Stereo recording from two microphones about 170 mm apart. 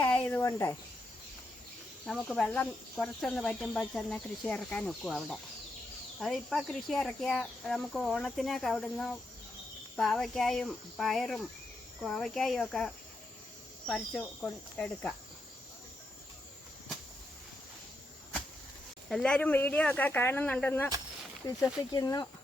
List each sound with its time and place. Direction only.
0.0 s cricket: 10° left (ahead or behind)
2.0 s speech: centre (ahead or behind)
19.0 s speech: 5° left (ahead or behind)
21.4 s speech: 20° left (ahead or behind)